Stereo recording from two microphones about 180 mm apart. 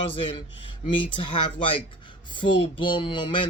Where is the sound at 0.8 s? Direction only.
30° left (ahead or behind).